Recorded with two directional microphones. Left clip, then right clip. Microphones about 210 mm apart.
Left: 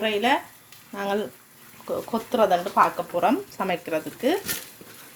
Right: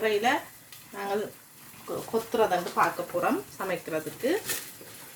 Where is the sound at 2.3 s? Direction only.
45° left (ahead or behind).